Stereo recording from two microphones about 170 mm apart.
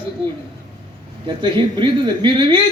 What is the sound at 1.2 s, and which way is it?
A man's voice, 25° right (ahead or behind).